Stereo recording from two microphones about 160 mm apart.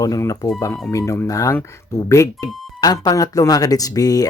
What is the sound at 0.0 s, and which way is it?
Speech, 20° left (ahead or behind).